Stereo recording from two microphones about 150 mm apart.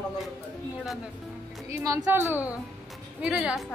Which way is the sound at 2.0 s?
15° right (ahead or behind).